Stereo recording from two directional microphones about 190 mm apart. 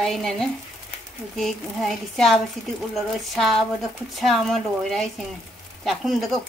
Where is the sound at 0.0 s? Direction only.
Centre (ahead or behind).